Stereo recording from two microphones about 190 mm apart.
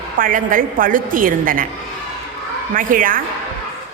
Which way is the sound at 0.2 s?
45° right (ahead or behind).